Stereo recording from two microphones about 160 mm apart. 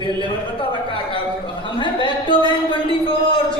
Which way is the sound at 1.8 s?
30° left (ahead or behind).